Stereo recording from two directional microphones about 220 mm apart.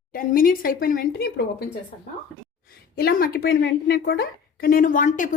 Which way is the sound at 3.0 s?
45° left (ahead or behind).